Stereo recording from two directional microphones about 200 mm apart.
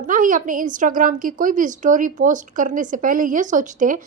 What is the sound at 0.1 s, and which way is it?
A woman's voice, 40° right (ahead or behind).